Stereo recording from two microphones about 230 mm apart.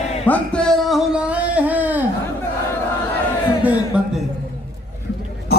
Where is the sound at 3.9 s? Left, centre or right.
Centre.